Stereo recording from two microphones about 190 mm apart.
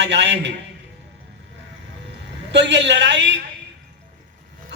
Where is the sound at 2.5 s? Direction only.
70° right (ahead or behind).